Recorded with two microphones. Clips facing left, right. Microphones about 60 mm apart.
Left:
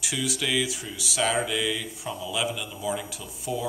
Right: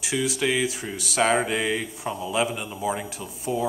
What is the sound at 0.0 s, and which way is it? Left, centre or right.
Speech, right.